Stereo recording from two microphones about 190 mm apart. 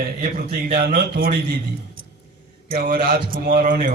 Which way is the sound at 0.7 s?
50° right (ahead or behind).